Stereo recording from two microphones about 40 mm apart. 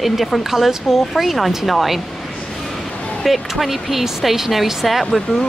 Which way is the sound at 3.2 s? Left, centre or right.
Centre.